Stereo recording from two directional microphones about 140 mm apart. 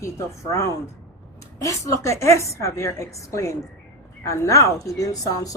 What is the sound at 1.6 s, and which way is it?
A woman's voice, 20° left (ahead or behind).